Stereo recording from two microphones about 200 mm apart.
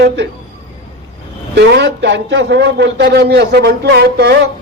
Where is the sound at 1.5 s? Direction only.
60° right (ahead or behind).